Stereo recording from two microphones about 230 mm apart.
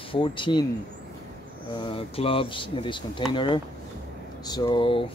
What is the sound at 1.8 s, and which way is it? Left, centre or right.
Speech, left.